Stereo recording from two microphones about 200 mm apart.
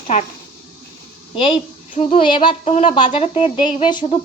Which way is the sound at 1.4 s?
25° left (ahead or behind).